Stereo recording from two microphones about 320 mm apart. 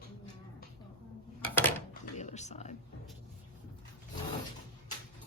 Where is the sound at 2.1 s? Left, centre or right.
Left.